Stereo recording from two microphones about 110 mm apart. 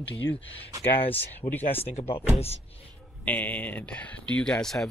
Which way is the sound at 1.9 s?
65° left (ahead or behind).